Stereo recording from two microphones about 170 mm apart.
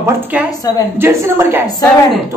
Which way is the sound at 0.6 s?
20° left (ahead or behind).